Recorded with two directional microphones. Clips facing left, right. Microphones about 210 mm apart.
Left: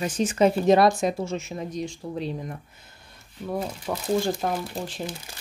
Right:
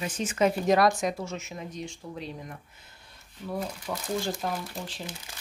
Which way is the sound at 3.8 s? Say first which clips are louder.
Left 6 dB; 60° left (ahead or behind).